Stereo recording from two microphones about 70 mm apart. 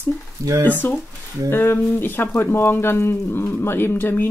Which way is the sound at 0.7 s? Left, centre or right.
Left.